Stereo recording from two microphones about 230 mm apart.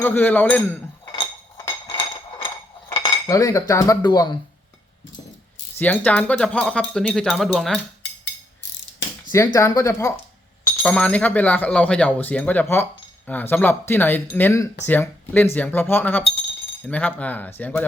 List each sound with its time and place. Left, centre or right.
0.0 s speech: centre
1.0 s a sound: centre
3.0 s cutlery: centre
5.7 s speech: centre
9.3 s speech: centre